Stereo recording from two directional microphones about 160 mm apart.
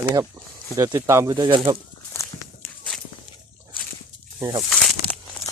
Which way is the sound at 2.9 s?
5° left (ahead or behind).